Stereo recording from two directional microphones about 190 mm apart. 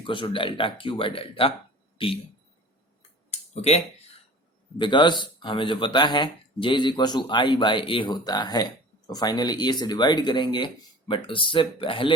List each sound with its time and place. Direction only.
0.0 s speech: 25° left (ahead or behind)
3.3 s a sound: 35° left (ahead or behind)
4.8 s speech: 25° left (ahead or behind)